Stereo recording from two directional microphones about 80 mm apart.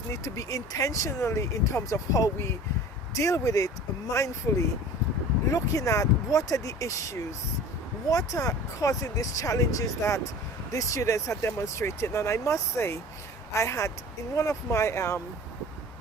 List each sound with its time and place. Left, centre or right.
0.1 s speech: left
5.5 s speech: left